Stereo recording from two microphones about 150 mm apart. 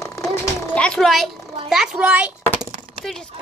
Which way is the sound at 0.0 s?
20° left (ahead or behind).